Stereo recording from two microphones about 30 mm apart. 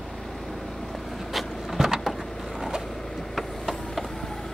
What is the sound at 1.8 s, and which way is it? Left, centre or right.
Vehicle, centre.